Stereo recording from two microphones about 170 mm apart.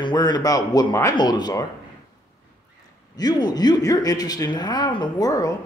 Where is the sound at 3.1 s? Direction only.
25° left (ahead or behind).